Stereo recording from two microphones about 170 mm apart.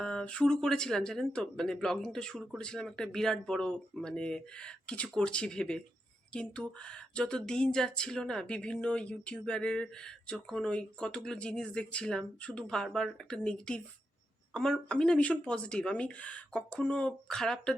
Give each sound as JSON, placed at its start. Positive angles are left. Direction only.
{"t": 0.0, "sound": "speech", "side_deg": 5}